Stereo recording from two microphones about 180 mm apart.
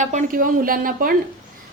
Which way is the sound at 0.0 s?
45° right (ahead or behind).